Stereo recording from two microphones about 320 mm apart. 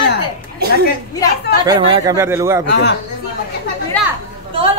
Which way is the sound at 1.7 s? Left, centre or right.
Centre.